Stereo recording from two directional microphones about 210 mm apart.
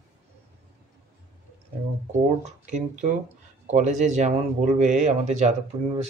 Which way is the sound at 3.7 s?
35° right (ahead or behind).